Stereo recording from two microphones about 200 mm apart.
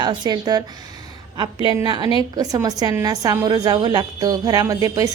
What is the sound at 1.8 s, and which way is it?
A woman's voice, 20° right (ahead or behind).